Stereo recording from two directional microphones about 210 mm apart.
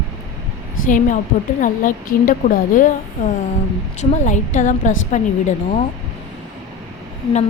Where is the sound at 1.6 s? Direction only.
40° left (ahead or behind).